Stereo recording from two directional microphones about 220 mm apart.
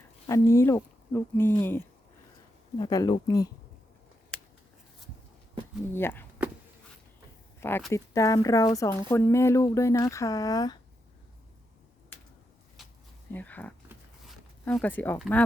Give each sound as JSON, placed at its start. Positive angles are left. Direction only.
{"t": 0.3, "sound": "speech", "side_deg": 15}
{"t": 5.9, "sound": "speech", "side_deg": 10}
{"t": 7.6, "sound": "speech", "side_deg": 5}
{"t": 13.3, "sound": "speech", "side_deg": 5}